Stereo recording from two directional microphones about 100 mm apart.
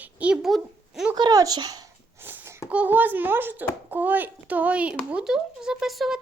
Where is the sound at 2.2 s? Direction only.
20° right (ahead or behind).